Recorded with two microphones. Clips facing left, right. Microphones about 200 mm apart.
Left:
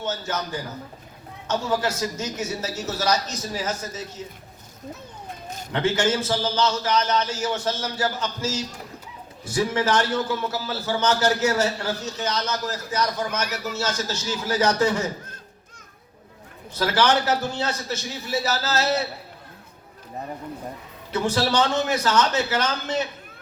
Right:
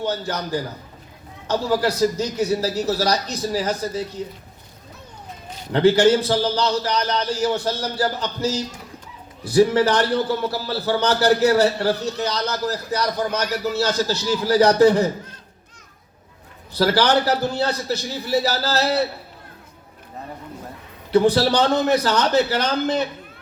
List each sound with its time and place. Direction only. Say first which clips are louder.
0.0 s a man's voice: right 3 dB; 35° right (ahead or behind)
5.7 s a man's voice: right 8 dB; 35° right (ahead or behind)
11.9 s a man's voice: right 7 dB; 60° right (ahead or behind)
12.2 s a man's voice: right 3 dB; 35° right (ahead or behind)
16.7 s a man's voice: right 3 dB; 35° right (ahead or behind)
21.1 s a man's voice: right 7 dB; 35° right (ahead or behind)